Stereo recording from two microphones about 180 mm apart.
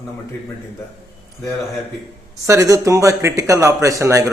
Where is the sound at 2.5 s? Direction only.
15° right (ahead or behind).